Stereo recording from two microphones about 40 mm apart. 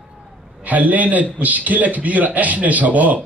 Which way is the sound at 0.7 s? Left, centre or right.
Right.